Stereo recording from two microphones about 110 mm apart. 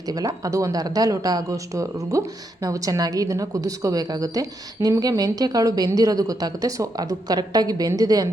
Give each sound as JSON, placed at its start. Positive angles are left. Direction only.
{"t": 0.0, "sound": "speech", "side_deg": -35}